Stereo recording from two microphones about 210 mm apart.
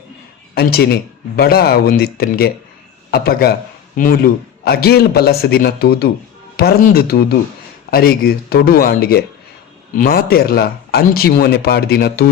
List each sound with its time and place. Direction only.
0.5 s speech: 45° left (ahead or behind)